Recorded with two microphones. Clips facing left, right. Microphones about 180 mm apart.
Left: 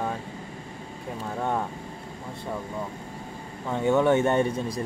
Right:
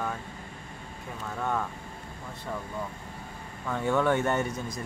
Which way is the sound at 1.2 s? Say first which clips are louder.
Left 3 dB; 30° left (ahead or behind).